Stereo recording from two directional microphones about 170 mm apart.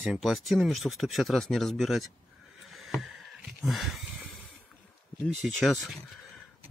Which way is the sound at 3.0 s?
Centre (ahead or behind).